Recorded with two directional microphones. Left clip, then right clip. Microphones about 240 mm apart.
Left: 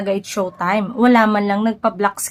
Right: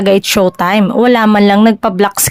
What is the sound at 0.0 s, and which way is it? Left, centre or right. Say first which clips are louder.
Speech: right 11 dB; right.